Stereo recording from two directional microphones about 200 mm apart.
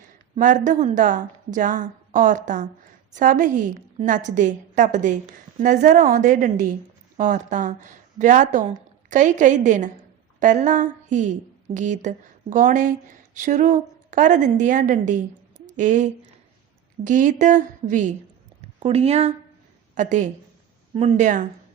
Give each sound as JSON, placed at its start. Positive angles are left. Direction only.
{"t": 0.3, "sound": "a woman's voice", "side_deg": -40}